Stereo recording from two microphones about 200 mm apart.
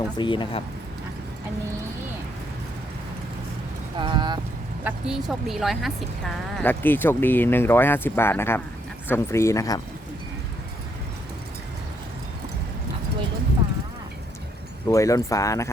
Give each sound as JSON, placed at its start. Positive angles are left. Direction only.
{"t": 0.2, "sound": "speech", "side_deg": 25}
{"t": 3.9, "sound": "speech", "side_deg": -25}
{"t": 4.8, "sound": "speech", "side_deg": -5}
{"t": 14.8, "sound": "speech", "side_deg": 15}